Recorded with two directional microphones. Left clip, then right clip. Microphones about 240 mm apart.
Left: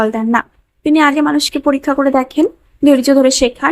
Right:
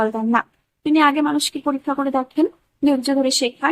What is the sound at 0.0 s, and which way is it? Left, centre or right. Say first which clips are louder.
Speech: left 5 dB; centre.